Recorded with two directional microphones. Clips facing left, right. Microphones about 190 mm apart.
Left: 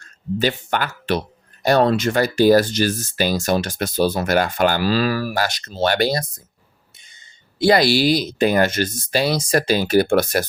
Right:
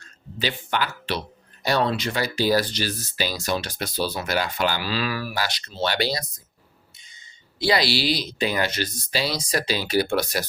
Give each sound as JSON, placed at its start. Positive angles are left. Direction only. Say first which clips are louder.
{"t": 0.0, "sound": "a man's voice", "louder": "left 8 dB", "side_deg": 45}